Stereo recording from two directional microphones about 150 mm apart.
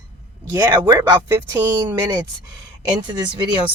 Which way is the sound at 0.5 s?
25° right (ahead or behind).